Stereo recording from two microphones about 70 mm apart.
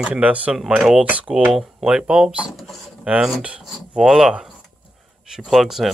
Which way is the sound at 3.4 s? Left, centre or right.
Centre.